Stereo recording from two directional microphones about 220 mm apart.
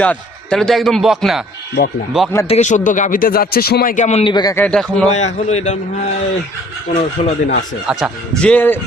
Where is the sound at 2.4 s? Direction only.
30° left (ahead or behind).